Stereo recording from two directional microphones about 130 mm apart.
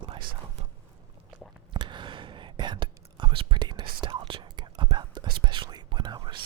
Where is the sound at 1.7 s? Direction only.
35° right (ahead or behind).